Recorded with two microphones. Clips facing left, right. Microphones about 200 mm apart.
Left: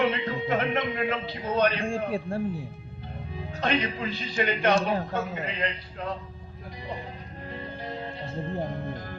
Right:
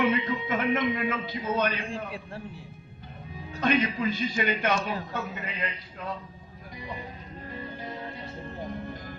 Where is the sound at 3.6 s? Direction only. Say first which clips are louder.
Right 2 dB; 50° right (ahead or behind).